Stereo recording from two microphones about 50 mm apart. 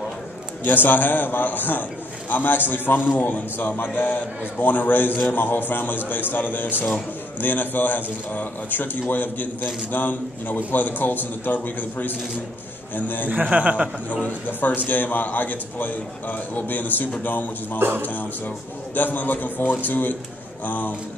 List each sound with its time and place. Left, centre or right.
0.7 s a man's voice: left
3.5 s a man's voice: left
13.3 s a man's voice: right
14.2 s a man's voice: left
17.7 s speech: right
18.0 s a man's voice: left